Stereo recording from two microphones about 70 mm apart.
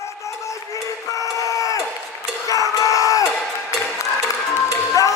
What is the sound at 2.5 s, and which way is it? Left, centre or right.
Crowd, left.